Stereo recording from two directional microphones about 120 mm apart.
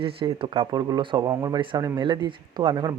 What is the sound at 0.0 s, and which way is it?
Speech, 50° right (ahead or behind).